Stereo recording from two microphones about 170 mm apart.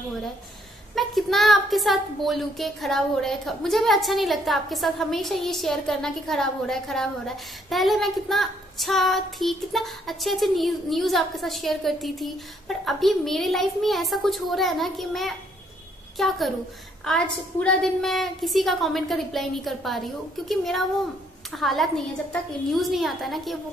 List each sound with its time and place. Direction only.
0.9 s speech: centre (ahead or behind)